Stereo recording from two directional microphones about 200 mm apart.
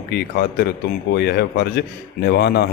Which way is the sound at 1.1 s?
55° left (ahead or behind).